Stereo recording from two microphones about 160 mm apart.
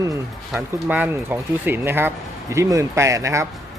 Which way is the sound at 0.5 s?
10° right (ahead or behind).